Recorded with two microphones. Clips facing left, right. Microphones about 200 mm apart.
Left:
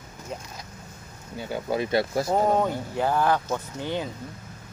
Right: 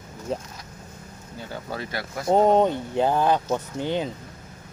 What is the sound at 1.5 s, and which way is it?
Speech, 15° left (ahead or behind).